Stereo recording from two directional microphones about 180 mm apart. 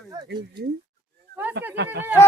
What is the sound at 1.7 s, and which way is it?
Speech, 70° right (ahead or behind).